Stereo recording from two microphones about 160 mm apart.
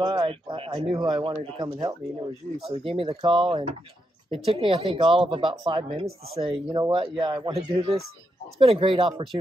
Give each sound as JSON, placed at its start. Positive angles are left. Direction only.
{"t": 0.0, "sound": "speech", "side_deg": -30}
{"t": 2.6, "sound": "speech", "side_deg": -35}